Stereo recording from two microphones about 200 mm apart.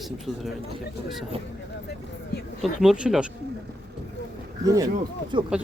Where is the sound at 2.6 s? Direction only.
5° right (ahead or behind).